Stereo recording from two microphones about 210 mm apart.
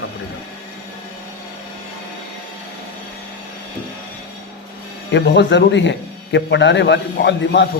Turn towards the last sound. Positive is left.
turn(degrees=55)  # may be behind; listen again after turning